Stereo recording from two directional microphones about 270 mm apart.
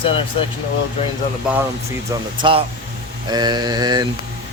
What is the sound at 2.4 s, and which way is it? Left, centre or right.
Speech, centre.